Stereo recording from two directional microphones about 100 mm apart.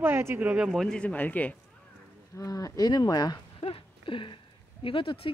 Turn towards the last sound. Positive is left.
turn(degrees=60)  # may be behind; listen again after turning